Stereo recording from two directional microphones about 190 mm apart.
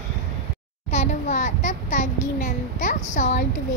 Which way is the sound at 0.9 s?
35° left (ahead or behind).